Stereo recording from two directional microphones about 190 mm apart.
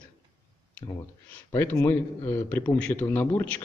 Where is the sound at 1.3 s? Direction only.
10° left (ahead or behind).